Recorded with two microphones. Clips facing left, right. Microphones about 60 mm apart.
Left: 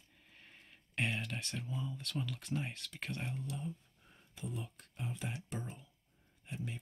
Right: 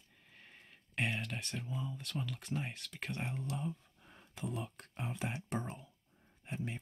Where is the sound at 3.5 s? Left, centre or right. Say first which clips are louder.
Right 3 dB; right.